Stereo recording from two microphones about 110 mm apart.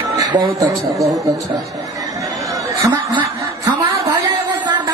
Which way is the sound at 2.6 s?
30° right (ahead or behind).